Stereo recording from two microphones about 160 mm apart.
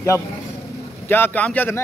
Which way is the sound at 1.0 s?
15° left (ahead or behind).